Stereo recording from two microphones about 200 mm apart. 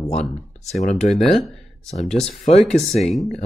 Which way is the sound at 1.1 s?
Centre (ahead or behind).